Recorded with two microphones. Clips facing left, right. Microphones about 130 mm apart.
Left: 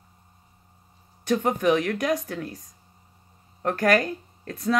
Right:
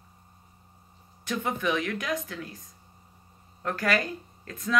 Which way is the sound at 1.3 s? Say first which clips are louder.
Left 7 dB; 40° left (ahead or behind).